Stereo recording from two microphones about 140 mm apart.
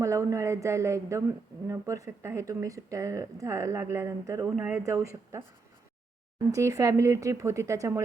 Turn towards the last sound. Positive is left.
turn(degrees=-20)  # may be behind; listen again after turning